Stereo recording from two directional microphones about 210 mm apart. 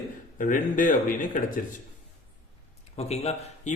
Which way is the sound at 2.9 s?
30° left (ahead or behind).